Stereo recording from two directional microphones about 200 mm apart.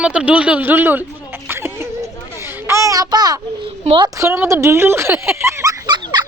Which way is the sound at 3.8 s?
25° right (ahead or behind).